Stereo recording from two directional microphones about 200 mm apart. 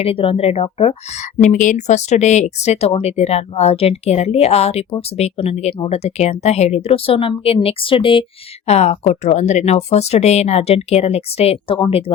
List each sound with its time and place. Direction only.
0.0 s a woman's voice: 30° left (ahead or behind)